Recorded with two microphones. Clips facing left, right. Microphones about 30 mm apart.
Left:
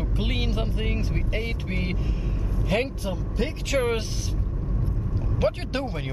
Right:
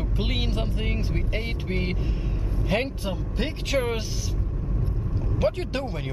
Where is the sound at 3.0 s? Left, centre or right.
Centre.